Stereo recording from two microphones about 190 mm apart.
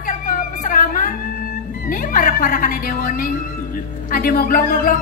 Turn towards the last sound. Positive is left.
turn(degrees=45)  # may be behind; listen again after turning